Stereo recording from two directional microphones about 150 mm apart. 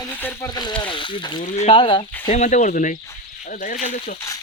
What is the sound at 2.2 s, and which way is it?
Speech, 55° left (ahead or behind).